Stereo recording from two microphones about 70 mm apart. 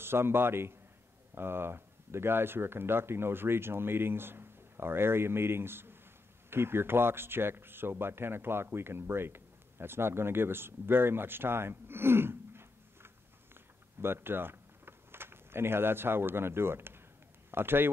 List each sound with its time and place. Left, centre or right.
0.0 s a man's voice: right